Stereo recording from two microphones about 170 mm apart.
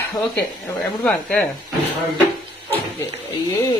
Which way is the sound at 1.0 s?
5° left (ahead or behind).